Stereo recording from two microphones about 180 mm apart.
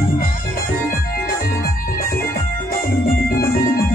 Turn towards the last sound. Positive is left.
turn(degrees=60)  # may be behind; listen again after turning